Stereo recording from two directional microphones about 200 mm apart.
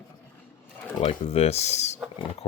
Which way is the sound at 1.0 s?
30° left (ahead or behind).